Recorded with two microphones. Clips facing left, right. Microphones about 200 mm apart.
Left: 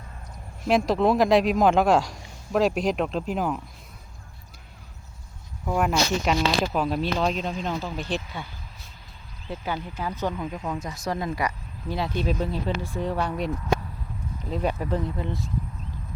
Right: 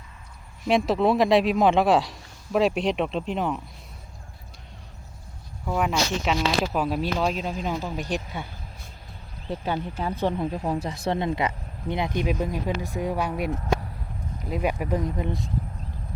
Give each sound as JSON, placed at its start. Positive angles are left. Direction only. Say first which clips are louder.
{"t": 0.6, "sound": "speech", "louder": "even", "side_deg": 0}
{"t": 5.6, "sound": "speech", "louder": "left 1 dB", "side_deg": 0}
{"t": 10.0, "sound": "speech", "louder": "right 3 dB", "side_deg": -30}
{"t": 14.5, "sound": "speech", "louder": "right 1 dB", "side_deg": -10}